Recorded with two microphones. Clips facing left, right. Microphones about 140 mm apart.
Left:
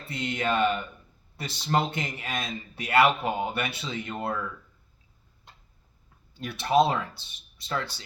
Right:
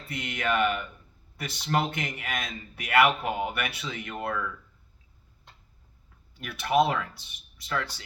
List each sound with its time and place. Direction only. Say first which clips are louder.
0.1 s speech: left 1 dB; 30° left (ahead or behind)
6.3 s speech: left 2 dB; 30° left (ahead or behind)